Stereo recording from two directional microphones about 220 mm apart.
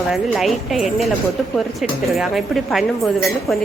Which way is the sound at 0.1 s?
Centre (ahead or behind).